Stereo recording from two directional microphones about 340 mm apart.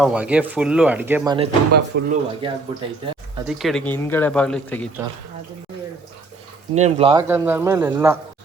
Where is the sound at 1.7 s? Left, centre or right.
Right.